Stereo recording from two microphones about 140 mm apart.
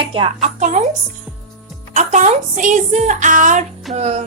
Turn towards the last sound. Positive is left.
turn(degrees=-50)  # may be behind; listen again after turning